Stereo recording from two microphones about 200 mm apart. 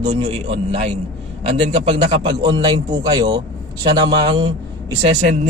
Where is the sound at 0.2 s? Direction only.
25° right (ahead or behind).